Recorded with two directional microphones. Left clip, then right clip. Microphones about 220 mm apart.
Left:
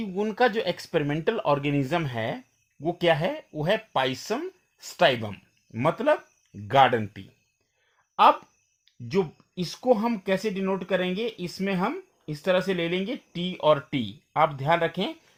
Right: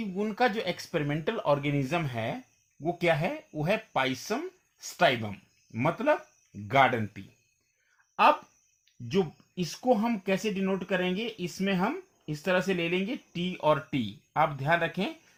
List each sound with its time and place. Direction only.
0.0 s speech: 35° left (ahead or behind)
9.0 s speech: 30° left (ahead or behind)